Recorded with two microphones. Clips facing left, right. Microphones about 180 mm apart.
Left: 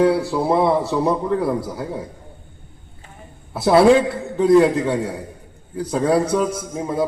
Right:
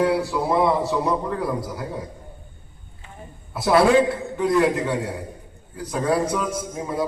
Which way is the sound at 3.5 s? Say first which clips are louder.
Left 4 dB; 25° left (ahead or behind).